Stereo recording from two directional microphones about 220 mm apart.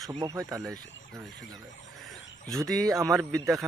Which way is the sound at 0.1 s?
20° right (ahead or behind).